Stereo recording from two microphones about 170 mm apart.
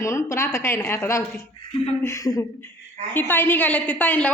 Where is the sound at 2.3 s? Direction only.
10° left (ahead or behind).